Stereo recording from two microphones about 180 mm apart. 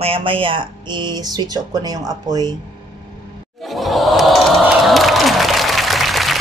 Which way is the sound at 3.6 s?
Centre (ahead or behind).